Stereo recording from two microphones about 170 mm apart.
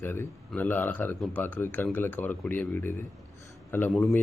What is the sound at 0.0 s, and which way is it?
A man's voice, 10° left (ahead or behind).